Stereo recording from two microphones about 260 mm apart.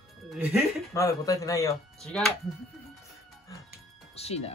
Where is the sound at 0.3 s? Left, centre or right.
Centre.